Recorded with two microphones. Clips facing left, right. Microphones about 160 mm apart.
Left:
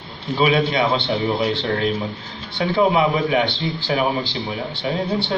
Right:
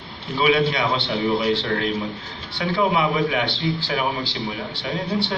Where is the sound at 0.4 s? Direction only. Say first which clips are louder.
Left 1 dB; 25° left (ahead or behind).